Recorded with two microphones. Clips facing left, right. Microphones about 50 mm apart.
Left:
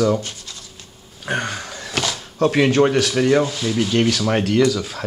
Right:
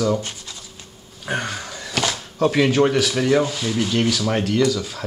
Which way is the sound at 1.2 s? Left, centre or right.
Centre.